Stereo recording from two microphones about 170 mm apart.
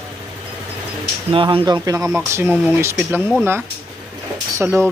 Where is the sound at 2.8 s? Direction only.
15° right (ahead or behind).